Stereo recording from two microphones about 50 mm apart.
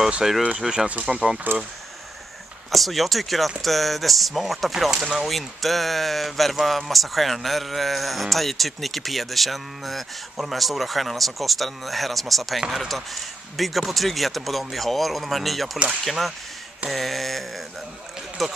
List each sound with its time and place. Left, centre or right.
0.2 s speech: centre
2.7 s speech: centre